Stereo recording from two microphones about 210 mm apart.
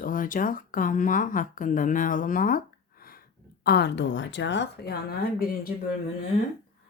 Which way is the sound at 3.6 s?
50° left (ahead or behind).